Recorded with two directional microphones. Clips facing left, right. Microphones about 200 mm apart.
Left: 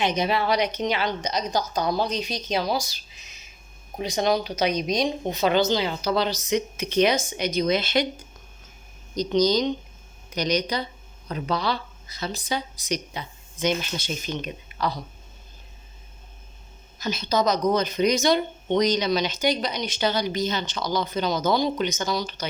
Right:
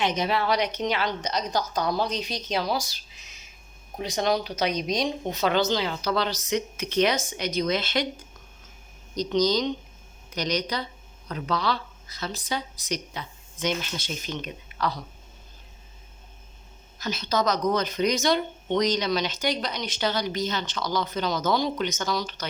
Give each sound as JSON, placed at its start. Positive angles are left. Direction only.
{"t": 0.0, "sound": "speech", "side_deg": 10}
{"t": 3.9, "sound": "speech", "side_deg": 15}
{"t": 9.3, "sound": "a woman's voice", "side_deg": 15}
{"t": 17.0, "sound": "speech", "side_deg": 20}